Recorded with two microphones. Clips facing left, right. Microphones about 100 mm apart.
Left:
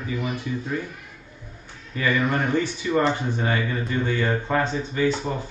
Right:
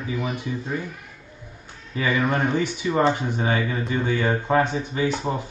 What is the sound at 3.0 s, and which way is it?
Speech, 20° right (ahead or behind).